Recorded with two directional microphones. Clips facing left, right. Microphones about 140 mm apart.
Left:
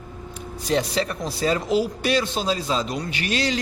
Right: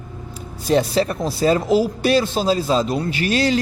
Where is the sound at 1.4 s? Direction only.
35° right (ahead or behind).